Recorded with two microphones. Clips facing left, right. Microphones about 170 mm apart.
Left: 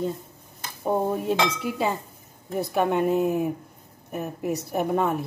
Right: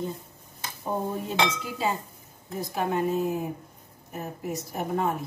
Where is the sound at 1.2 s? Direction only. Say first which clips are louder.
Left 3 dB; 65° left (ahead or behind).